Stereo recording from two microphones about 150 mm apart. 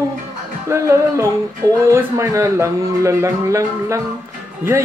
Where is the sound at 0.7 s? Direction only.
20° right (ahead or behind).